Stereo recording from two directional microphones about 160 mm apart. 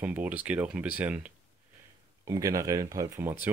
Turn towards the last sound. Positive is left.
turn(degrees=-15)  # may be behind; listen again after turning